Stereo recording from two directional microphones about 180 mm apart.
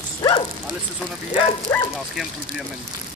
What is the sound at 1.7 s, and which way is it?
Speech, 10° left (ahead or behind).